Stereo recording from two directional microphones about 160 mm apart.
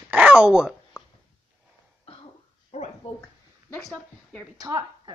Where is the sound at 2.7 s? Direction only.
45° left (ahead or behind).